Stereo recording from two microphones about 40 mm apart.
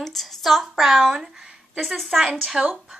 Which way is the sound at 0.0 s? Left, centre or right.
Centre.